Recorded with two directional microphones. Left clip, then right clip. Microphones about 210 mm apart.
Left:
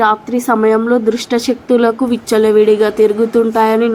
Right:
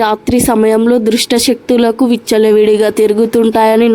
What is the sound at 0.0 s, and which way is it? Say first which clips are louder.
A woman's voice: right 1 dB; 40° right (ahead or behind).